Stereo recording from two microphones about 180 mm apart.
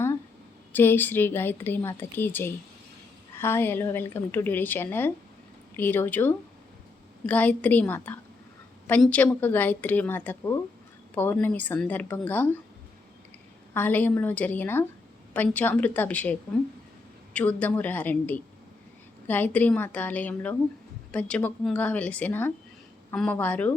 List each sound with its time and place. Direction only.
0.7 s a woman's voice: 10° left (ahead or behind)
13.7 s a woman's voice: 10° left (ahead or behind)